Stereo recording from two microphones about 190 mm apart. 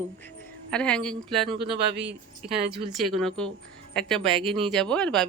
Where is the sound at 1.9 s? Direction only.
65° right (ahead or behind).